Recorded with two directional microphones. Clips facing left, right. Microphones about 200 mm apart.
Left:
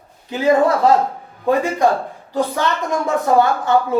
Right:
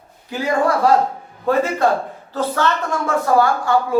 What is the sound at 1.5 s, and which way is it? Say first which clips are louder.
A man's voice: left 1 dB; 15° left (ahead or behind).